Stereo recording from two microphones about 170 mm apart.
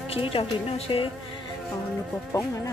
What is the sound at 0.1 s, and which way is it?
Speech, 35° left (ahead or behind).